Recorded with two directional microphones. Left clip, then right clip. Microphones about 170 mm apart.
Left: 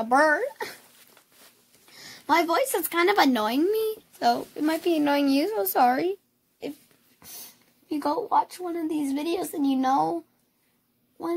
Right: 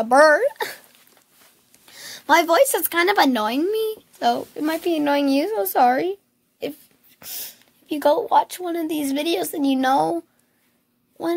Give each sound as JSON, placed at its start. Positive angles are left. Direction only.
{"t": 0.0, "sound": "speech", "side_deg": -30}
{"t": 1.9, "sound": "speech", "side_deg": -25}
{"t": 7.9, "sound": "speech", "side_deg": -45}